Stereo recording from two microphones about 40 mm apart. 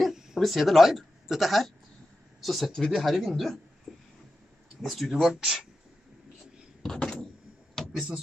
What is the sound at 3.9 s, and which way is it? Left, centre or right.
Vehicle, centre.